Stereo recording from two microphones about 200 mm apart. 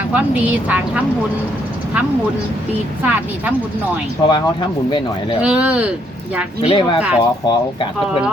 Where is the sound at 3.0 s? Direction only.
10° right (ahead or behind).